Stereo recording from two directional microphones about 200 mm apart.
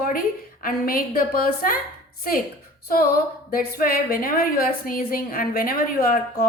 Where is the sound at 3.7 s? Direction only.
50° left (ahead or behind).